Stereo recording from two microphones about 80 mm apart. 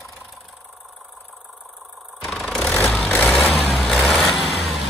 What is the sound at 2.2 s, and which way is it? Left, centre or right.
Vehicle, centre.